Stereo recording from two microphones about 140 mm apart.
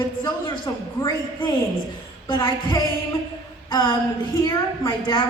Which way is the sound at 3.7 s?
30° left (ahead or behind).